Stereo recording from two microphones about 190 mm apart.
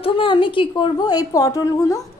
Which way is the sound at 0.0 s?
25° left (ahead or behind).